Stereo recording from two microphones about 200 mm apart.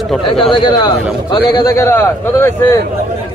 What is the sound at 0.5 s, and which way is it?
A man's voice, 25° left (ahead or behind).